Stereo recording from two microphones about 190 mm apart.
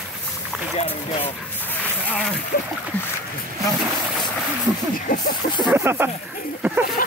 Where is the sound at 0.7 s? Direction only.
30° left (ahead or behind).